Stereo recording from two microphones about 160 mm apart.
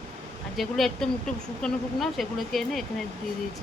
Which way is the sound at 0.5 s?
Centre (ahead or behind).